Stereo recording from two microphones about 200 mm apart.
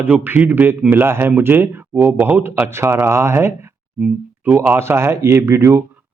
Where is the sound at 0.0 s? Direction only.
10° right (ahead or behind).